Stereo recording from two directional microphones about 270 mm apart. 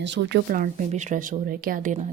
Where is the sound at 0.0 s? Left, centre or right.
Right.